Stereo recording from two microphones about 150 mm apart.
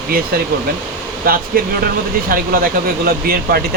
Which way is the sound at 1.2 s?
75° right (ahead or behind).